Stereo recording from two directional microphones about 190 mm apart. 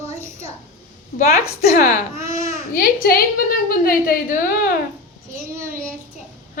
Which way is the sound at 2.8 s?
50° left (ahead or behind).